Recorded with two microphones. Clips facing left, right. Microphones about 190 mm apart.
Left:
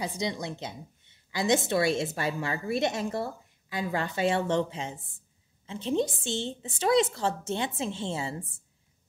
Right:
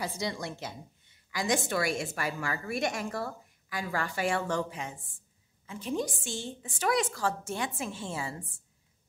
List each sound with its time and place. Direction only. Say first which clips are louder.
0.0 s a woman's voice: left 2 dB; 20° left (ahead or behind)